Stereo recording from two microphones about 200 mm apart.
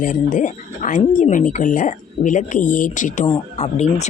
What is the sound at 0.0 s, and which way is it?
Speech, 40° left (ahead or behind).